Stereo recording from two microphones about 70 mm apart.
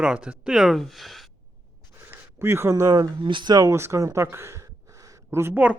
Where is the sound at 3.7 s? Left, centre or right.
Right.